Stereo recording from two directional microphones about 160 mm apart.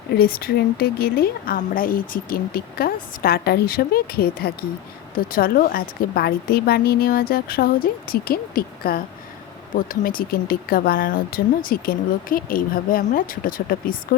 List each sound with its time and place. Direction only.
0.1 s a woman's voice: 70° left (ahead or behind)